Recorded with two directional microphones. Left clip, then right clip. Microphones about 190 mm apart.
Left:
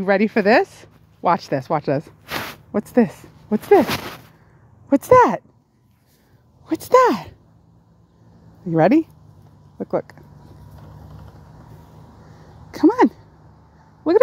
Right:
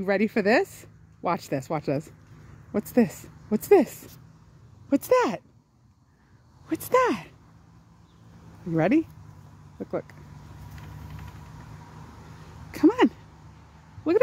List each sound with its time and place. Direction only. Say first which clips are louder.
0.0 s speech: left 7 dB; 5° left (ahead or behind)
4.8 s speech: left 10 dB; 15° left (ahead or behind)
6.7 s speech: left 8 dB; 25° left (ahead or behind)
8.7 s speech: left 8 dB; 25° left (ahead or behind)
12.7 s a sound: left 5 dB; 15° left (ahead or behind)
14.0 s speech: left 7 dB; 20° left (ahead or behind)